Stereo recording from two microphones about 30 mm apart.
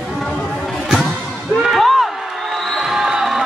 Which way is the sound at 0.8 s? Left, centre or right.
Centre.